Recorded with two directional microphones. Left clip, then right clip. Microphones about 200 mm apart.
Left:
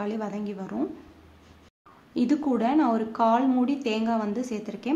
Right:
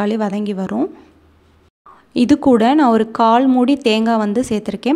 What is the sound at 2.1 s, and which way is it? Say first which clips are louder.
Speech: right 12 dB; 50° right (ahead or behind).